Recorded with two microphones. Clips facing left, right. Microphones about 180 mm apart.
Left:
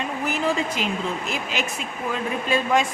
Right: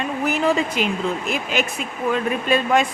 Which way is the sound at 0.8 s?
60° right (ahead or behind).